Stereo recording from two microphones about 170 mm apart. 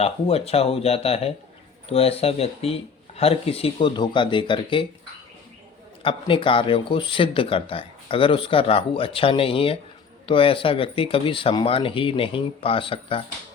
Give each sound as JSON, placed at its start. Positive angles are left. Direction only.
{"t": 0.0, "sound": "speech", "side_deg": 35}
{"t": 6.0, "sound": "speech", "side_deg": 30}